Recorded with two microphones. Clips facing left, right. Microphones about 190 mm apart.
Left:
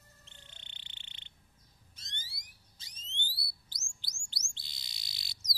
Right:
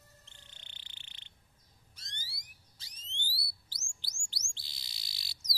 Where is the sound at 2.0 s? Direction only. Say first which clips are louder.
Even; 20° left (ahead or behind).